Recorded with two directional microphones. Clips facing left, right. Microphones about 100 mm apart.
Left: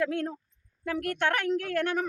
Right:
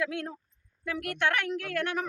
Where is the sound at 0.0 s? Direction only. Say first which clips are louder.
Left 4 dB; 45° left (ahead or behind).